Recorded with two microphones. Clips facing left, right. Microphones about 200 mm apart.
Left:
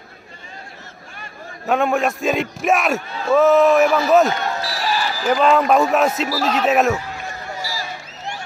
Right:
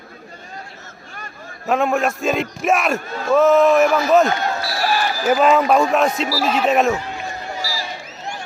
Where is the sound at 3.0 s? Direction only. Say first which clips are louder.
Right 2 dB; 45° right (ahead or behind).